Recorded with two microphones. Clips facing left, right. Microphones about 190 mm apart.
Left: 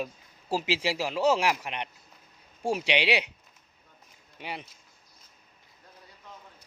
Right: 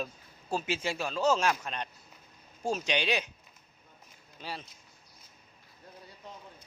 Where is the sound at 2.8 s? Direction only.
75° left (ahead or behind).